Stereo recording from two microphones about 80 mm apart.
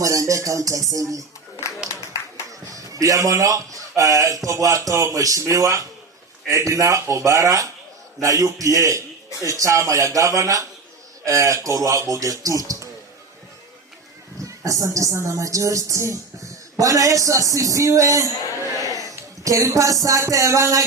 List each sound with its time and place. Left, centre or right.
0.0 s music: right
2.5 s a man's voice: right
14.4 s speech: right